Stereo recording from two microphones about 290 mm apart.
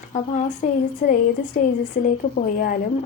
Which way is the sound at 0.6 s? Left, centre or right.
Left.